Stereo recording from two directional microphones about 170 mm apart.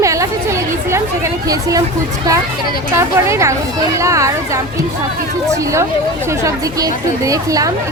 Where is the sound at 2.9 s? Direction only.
15° right (ahead or behind).